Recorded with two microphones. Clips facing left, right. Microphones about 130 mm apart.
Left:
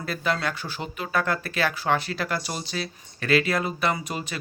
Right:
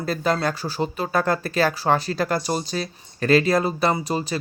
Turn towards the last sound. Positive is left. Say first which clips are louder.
# right 5 dB
turn(degrees=-35)  # may be behind; listen again after turning